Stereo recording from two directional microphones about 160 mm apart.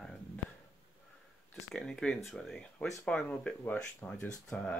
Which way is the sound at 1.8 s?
5° left (ahead or behind).